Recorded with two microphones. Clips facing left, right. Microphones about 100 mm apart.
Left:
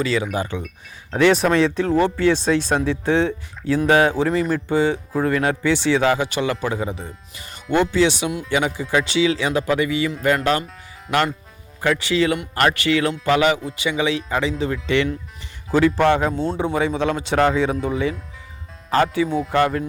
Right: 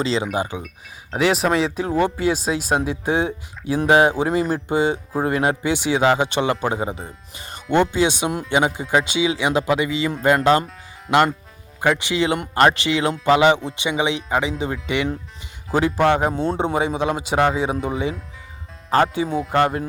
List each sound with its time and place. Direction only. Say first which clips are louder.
0.0 s speech: even; 25° right (ahead or behind)
0.3 s speech: right 1 dB; 15° right (ahead or behind)
11.1 s speech: right 4 dB; 35° right (ahead or behind)
11.8 s speech: even; 20° right (ahead or behind)
18.9 s speech: even; 35° right (ahead or behind)